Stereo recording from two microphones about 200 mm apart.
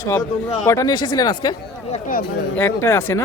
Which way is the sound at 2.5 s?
10° left (ahead or behind).